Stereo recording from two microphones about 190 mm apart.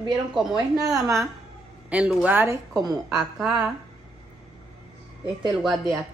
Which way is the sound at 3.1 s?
Centre (ahead or behind).